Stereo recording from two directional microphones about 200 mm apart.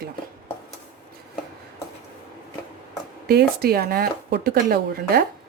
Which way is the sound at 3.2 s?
55° right (ahead or behind).